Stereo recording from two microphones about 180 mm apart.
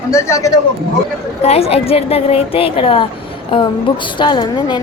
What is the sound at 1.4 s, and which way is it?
A woman's voice, 35° left (ahead or behind).